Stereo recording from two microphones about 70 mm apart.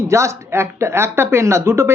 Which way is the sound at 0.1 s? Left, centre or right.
Right.